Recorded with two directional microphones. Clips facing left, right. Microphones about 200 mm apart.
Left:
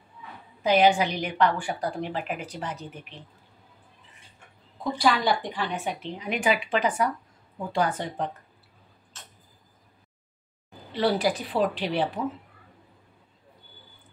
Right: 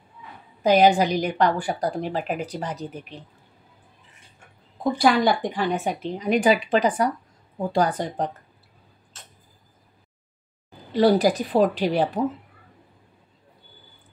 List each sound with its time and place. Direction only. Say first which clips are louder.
0.7 s a woman's voice: right 4 dB; 40° right (ahead or behind)
4.9 s a woman's voice: right 4 dB; 50° right (ahead or behind)
10.9 s a woman's voice: right 6 dB; 40° right (ahead or behind)